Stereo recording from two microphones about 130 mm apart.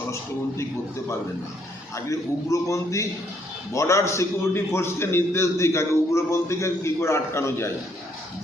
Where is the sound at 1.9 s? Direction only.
25° left (ahead or behind).